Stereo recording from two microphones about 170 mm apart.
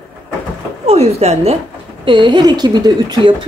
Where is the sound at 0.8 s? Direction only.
40° right (ahead or behind).